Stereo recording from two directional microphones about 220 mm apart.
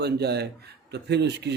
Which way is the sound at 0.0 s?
50° right (ahead or behind).